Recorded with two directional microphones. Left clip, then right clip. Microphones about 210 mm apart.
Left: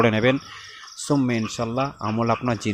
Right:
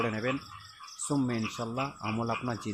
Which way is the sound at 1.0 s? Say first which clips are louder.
Left 9 dB; 25° left (ahead or behind).